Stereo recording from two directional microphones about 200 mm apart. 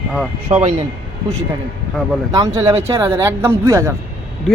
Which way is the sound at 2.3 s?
15° right (ahead or behind).